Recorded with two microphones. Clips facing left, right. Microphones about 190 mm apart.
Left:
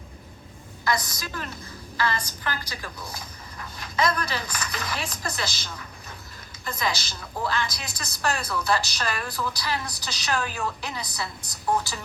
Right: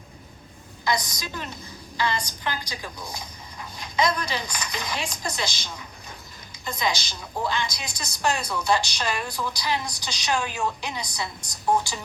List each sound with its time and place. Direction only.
0.9 s speech: 15° right (ahead or behind)